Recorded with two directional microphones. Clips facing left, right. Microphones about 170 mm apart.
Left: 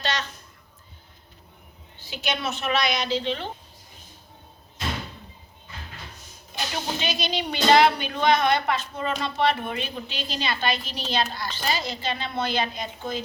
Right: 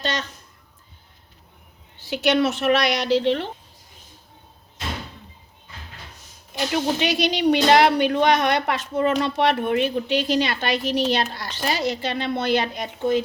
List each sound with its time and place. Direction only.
0.0 s a sound: 45° right (ahead or behind)
2.0 s a woman's voice: 75° right (ahead or behind)
7.0 s a woman's voice: 75° right (ahead or behind)